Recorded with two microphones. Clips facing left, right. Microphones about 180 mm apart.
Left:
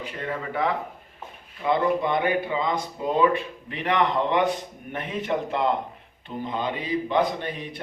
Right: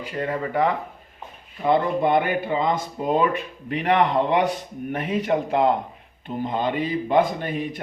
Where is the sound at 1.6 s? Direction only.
50° right (ahead or behind).